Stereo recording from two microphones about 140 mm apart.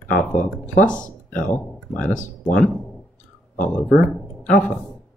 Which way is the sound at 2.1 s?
75° left (ahead or behind).